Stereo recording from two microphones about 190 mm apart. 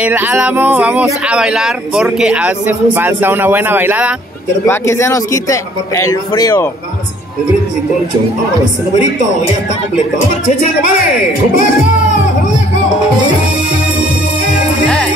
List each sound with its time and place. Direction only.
0.0 s speech: 10° right (ahead or behind)
4.6 s speech: 15° left (ahead or behind)